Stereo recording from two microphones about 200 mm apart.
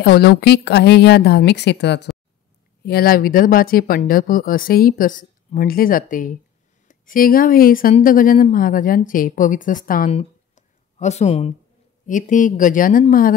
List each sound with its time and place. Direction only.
0.0 s a woman's voice: 55° left (ahead or behind)